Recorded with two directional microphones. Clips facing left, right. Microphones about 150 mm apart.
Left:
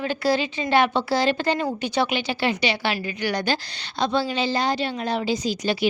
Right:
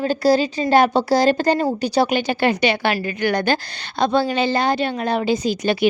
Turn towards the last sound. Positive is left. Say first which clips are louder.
# right 5 dB
turn(degrees=-55)  # may be behind; listen again after turning